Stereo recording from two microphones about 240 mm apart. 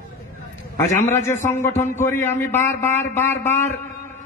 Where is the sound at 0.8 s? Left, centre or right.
Left.